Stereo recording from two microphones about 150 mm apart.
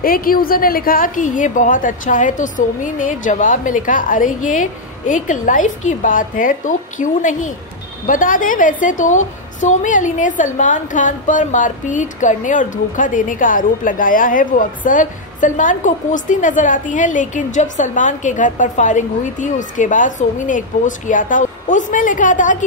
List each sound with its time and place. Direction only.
0.0 s a woman's voice: 75° left (ahead or behind)